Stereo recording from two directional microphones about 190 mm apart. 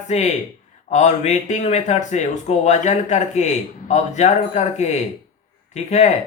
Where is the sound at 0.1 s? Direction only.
35° left (ahead or behind).